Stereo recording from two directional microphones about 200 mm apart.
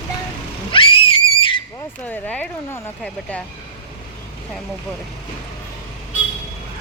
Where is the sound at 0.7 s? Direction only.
25° left (ahead or behind).